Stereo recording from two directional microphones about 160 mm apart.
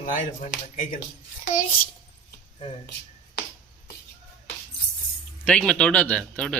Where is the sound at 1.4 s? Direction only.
55° left (ahead or behind).